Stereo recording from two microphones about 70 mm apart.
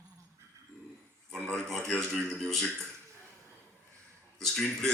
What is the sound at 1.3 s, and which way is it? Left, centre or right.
A man's voice, centre.